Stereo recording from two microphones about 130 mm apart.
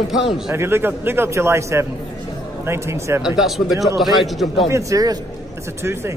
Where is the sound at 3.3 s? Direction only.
Centre (ahead or behind).